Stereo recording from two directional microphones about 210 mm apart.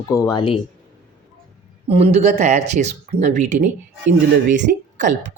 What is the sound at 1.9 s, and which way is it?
Speech, 30° right (ahead or behind).